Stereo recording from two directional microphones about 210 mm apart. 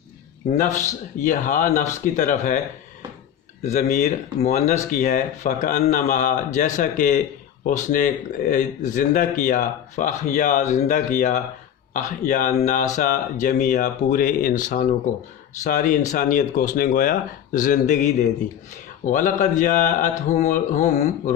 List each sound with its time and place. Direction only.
0.7 s a man's voice: 15° left (ahead or behind)
1.2 s speech: 40° left (ahead or behind)
3.6 s speech: 35° left (ahead or behind)